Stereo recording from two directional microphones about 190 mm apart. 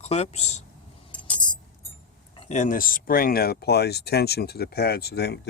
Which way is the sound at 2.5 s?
45° left (ahead or behind).